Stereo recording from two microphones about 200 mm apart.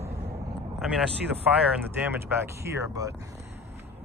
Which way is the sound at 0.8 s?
5° right (ahead or behind).